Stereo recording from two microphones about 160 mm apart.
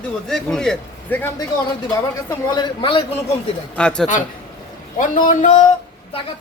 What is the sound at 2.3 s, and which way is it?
Speech, 25° left (ahead or behind).